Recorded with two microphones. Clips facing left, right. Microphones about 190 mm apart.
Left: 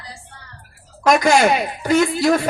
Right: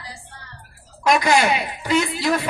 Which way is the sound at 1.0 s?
45° left (ahead or behind).